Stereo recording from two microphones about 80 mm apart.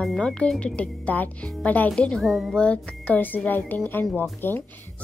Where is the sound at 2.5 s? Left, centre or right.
Centre.